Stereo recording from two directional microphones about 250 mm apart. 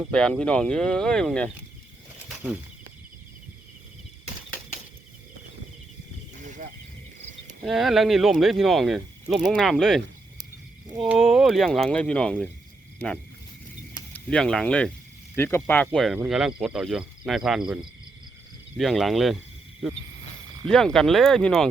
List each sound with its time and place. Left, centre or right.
0.1 s speech: centre
6.4 s a sound: right
7.6 s speech: centre
11.0 s speech: centre
14.1 s speech: centre
18.8 s speech: centre